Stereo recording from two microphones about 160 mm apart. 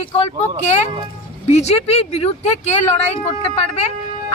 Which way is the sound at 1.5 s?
40° left (ahead or behind).